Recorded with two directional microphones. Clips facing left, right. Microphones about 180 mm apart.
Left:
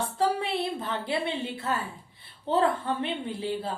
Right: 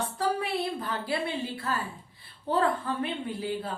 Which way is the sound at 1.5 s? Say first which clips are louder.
Left 2 dB; 25° left (ahead or behind).